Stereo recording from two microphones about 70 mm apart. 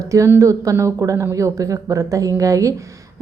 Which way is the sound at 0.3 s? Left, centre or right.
Right.